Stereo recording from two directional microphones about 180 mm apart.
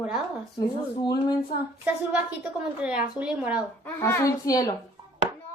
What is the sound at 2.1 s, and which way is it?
A woman's voice, 5° right (ahead or behind).